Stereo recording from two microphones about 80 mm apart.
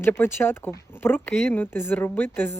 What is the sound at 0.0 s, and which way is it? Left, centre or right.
Speech, left.